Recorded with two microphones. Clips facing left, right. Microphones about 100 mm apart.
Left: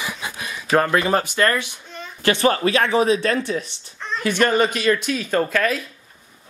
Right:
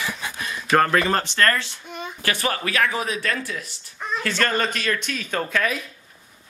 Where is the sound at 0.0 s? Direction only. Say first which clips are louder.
Even; 15° left (ahead or behind).